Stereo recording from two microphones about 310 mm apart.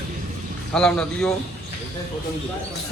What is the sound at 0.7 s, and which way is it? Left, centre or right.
Speech, centre.